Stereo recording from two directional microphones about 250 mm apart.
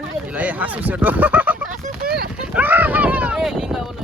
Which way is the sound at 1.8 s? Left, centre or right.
Right.